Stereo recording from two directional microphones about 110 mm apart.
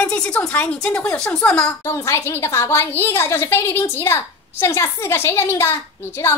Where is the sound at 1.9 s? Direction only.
25° left (ahead or behind).